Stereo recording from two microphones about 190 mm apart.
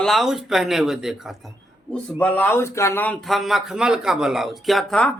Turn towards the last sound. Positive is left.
turn(degrees=5)  # may be behind; listen again after turning